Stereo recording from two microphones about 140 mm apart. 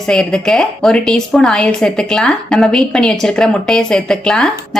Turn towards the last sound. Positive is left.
turn(degrees=5)  # may be behind; listen again after turning